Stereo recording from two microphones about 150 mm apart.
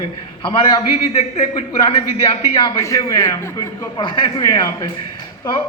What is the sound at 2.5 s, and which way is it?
A man's voice, 25° left (ahead or behind).